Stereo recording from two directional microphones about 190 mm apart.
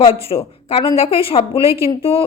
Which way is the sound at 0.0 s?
30° left (ahead or behind).